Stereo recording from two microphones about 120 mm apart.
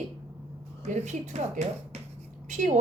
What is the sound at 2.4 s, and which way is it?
Speech, 85° right.